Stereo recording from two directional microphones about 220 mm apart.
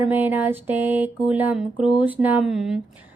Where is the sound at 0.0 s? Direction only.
10° right (ahead or behind).